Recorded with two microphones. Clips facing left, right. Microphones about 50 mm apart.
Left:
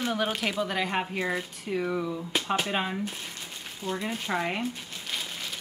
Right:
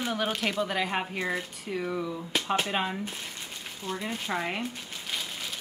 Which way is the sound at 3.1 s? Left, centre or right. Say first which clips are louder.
Even; centre.